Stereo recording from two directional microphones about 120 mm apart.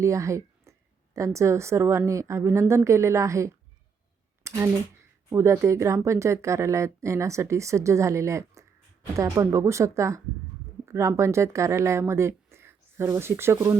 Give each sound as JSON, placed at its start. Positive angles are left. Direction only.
{"t": 0.0, "sound": "speech", "side_deg": -25}
{"t": 4.4, "sound": "a sound", "side_deg": -25}
{"t": 5.3, "sound": "a woman's voice", "side_deg": -25}